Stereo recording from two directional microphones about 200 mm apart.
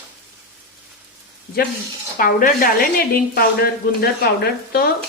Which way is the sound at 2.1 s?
45° left (ahead or behind).